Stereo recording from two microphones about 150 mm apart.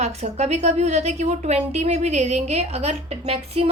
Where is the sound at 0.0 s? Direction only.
45° right (ahead or behind).